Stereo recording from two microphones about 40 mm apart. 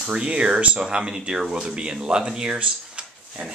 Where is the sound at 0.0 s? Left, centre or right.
Right.